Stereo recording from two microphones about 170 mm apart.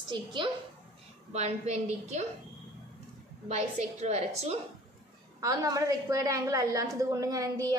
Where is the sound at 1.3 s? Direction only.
40° right (ahead or behind).